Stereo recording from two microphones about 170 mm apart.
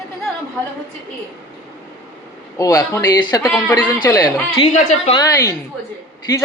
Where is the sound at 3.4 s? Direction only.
10° left (ahead or behind).